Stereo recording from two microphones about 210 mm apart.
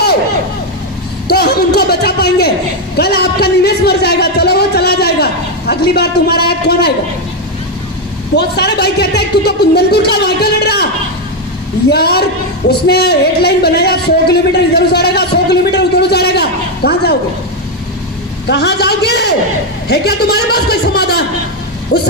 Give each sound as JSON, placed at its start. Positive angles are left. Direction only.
{"t": 1.3, "sound": "a sound", "side_deg": 50}
{"t": 8.4, "sound": "speech", "side_deg": 50}
{"t": 11.9, "sound": "a man's voice", "side_deg": 50}
{"t": 18.4, "sound": "speech", "side_deg": 50}